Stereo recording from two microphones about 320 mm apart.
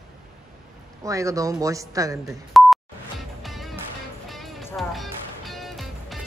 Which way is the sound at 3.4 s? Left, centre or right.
Centre.